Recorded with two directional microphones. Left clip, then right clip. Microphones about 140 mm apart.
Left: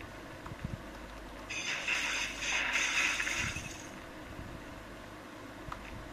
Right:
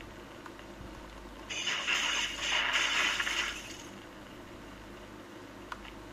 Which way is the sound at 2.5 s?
45° right (ahead or behind).